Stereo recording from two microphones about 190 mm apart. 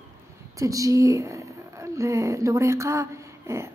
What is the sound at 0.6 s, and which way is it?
A woman's voice, 15° right (ahead or behind).